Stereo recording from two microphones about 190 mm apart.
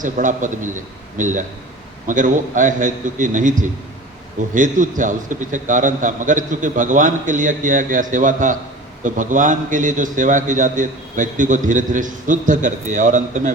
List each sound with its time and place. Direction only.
0.0 s a man's voice: 40° right (ahead or behind)